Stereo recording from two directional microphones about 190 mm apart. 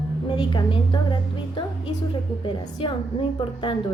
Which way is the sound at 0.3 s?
25° left (ahead or behind).